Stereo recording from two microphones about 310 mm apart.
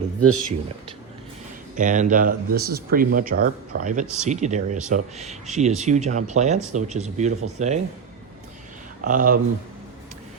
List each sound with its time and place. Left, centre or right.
0.2 s speech: right
1.7 s speech: right
4.0 s speech: centre
4.3 s speech: right
9.0 s speech: right